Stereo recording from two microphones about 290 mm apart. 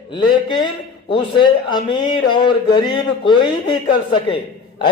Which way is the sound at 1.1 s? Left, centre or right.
Centre.